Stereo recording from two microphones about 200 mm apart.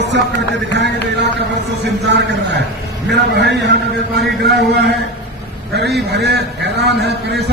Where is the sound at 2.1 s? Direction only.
60° right (ahead or behind).